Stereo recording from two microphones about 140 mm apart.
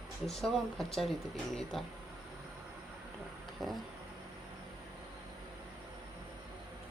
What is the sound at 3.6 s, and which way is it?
Speech, centre (ahead or behind).